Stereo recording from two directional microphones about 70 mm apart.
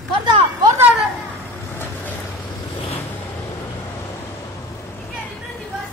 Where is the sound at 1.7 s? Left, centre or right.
Left.